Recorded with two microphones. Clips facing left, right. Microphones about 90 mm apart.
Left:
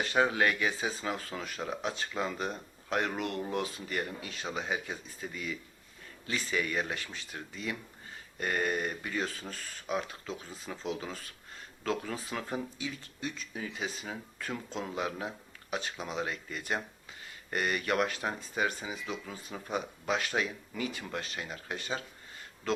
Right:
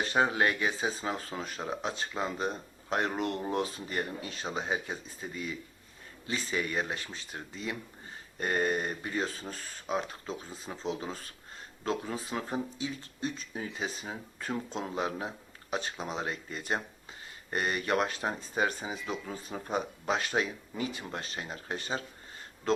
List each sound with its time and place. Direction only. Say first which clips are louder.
0.0 s speech: even; 30° right (ahead or behind)